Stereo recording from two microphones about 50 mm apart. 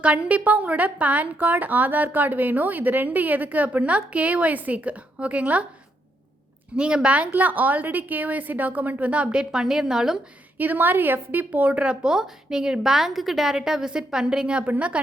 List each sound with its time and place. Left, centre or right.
0.0 s a woman's voice: right
6.7 s a woman's voice: centre
10.6 s a woman's voice: right